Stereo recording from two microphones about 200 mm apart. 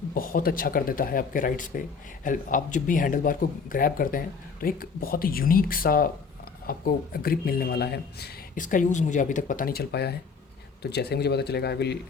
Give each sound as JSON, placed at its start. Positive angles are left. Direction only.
{"t": 0.1, "sound": "a man's voice", "side_deg": 45}